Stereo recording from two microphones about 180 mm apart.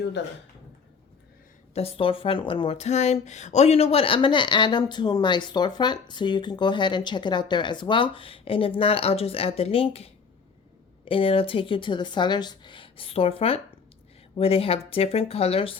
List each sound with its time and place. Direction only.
0.2 s speech: 75° left (ahead or behind)
1.7 s speech: 30° left (ahead or behind)